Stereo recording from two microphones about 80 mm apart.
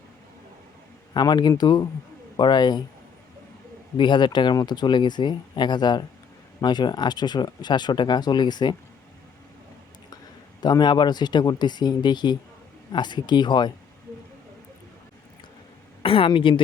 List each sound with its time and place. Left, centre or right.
1.1 s speech: left
3.9 s speech: left
10.6 s speech: left
16.2 s a woman's voice: left